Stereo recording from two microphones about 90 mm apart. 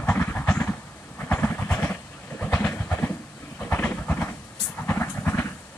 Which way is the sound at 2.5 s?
15° left (ahead or behind).